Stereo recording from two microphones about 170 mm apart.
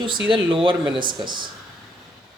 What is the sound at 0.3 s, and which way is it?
Speech, 30° right (ahead or behind).